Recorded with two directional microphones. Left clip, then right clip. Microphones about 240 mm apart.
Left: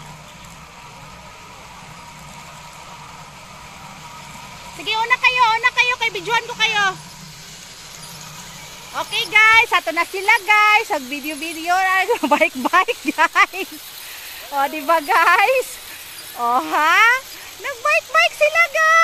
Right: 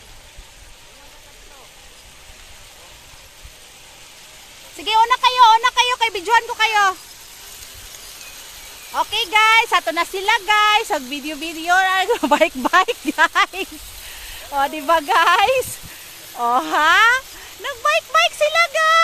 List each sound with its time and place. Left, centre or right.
4.8 s speech: centre
8.9 s speech: centre